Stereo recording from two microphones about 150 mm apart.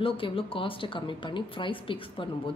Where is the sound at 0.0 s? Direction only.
35° left (ahead or behind).